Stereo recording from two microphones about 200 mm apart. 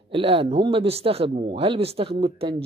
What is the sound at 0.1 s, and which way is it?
Speech, 30° right (ahead or behind).